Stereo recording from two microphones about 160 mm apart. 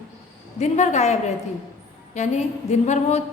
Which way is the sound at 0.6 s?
45° left (ahead or behind).